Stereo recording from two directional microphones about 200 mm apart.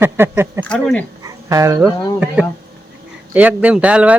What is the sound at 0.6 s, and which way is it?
Speech, 5° left (ahead or behind).